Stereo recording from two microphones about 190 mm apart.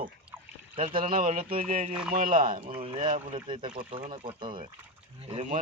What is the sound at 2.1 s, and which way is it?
Speech, 45° right (ahead or behind).